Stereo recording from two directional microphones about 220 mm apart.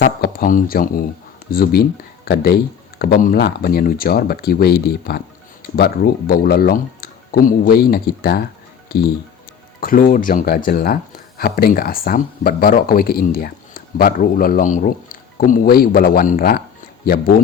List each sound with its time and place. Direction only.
0.0 s speech: 45° left (ahead or behind)
9.8 s speech: 40° left (ahead or behind)